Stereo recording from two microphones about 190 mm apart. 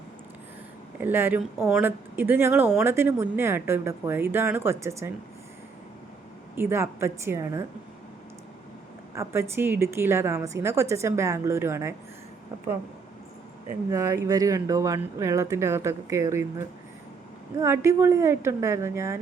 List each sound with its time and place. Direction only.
0.9 s speech: 10° right (ahead or behind)
6.6 s speech: 10° right (ahead or behind)
9.1 s speech: 15° right (ahead or behind)
13.9 s speech: 15° right (ahead or behind)